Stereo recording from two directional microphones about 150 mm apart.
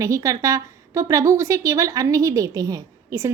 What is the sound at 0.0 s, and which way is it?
A woman's voice, 20° right (ahead or behind).